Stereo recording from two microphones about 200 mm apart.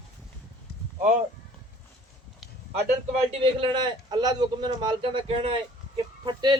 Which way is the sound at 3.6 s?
25° right (ahead or behind).